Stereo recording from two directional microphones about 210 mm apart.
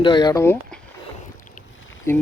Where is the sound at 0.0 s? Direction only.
20° left (ahead or behind).